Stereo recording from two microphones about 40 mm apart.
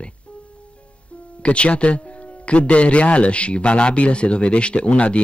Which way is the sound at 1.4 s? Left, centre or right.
Left.